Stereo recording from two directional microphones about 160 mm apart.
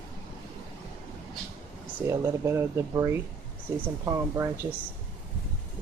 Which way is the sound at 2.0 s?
20° right (ahead or behind).